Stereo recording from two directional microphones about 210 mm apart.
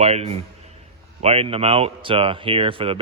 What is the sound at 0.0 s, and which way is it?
Speech, 30° right (ahead or behind).